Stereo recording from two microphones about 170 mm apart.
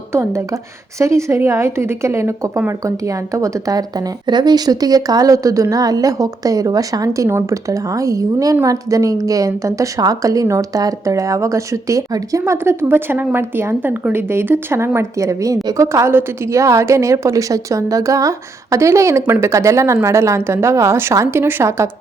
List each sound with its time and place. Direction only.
0.1 s a woman's voice: 15° right (ahead or behind)